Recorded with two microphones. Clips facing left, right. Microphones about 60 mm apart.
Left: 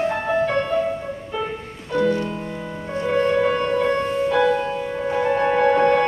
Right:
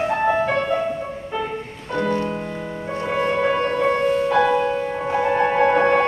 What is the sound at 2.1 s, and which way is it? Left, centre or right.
Music, right.